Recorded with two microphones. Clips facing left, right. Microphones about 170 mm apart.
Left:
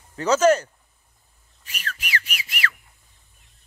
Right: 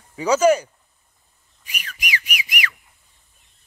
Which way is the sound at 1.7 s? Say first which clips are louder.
Right 1 dB; 10° right (ahead or behind).